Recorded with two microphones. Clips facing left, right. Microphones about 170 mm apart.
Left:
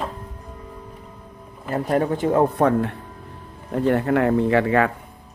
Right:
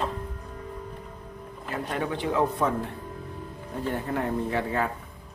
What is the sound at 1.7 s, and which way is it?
Speech, 45° left (ahead or behind).